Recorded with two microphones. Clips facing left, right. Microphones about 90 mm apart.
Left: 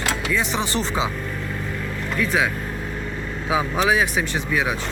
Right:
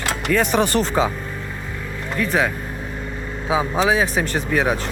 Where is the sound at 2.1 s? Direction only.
40° right (ahead or behind).